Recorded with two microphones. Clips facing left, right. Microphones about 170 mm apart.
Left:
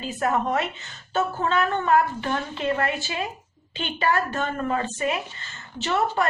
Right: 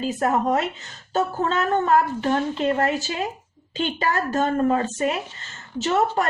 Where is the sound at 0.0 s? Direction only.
40° right (ahead or behind).